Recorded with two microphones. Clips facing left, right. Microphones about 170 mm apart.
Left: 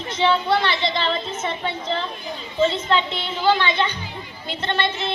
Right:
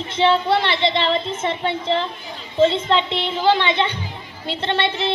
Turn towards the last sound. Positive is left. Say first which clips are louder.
# right 3 dB
turn(degrees=-30)  # may be behind; listen again after turning